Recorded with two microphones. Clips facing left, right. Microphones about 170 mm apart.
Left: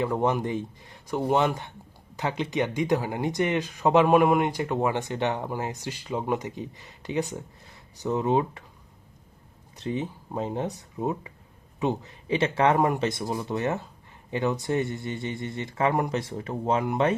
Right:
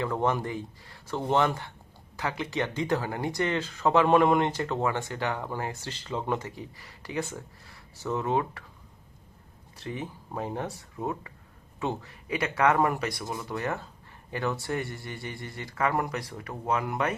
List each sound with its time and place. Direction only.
0.0 s speech: 15° left (ahead or behind)
9.7 s speech: 20° left (ahead or behind)